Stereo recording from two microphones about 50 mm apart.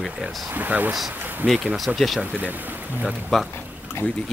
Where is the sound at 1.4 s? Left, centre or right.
Centre.